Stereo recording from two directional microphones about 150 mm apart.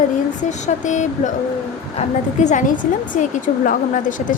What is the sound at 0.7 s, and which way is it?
Speech, 55° left (ahead or behind).